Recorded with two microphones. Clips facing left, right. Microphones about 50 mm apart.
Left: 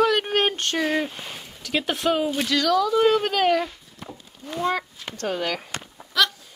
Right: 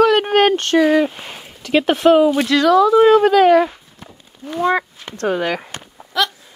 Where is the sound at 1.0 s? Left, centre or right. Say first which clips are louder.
Right 9 dB; right.